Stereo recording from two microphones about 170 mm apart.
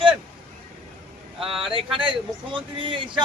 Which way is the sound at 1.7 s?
30° right (ahead or behind).